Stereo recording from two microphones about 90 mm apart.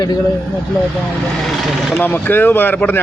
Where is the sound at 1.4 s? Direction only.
Centre (ahead or behind).